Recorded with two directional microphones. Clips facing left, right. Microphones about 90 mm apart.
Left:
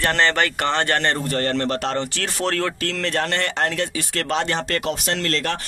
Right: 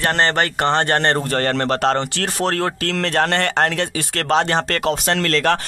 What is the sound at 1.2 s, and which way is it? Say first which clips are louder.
Speech: right 3 dB; 75° right (ahead or behind).